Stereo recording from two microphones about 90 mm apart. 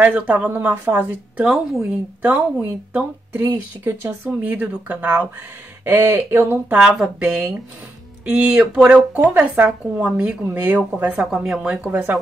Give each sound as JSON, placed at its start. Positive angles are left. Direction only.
{"t": 0.0, "sound": "speech", "side_deg": -15}
{"t": 1.4, "sound": "a woman's voice", "side_deg": -5}
{"t": 2.2, "sound": "speech", "side_deg": -15}
{"t": 3.3, "sound": "speech", "side_deg": -25}
{"t": 6.9, "sound": "speech", "side_deg": -5}
{"t": 11.1, "sound": "speech", "side_deg": -5}